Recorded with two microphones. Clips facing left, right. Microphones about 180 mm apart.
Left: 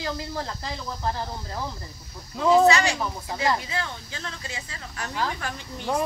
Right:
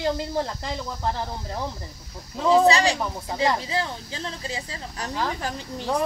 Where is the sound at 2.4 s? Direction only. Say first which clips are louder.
Even; 35° right (ahead or behind).